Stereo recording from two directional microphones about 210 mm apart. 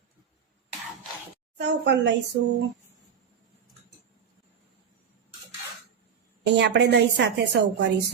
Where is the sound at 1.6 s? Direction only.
55° right (ahead or behind).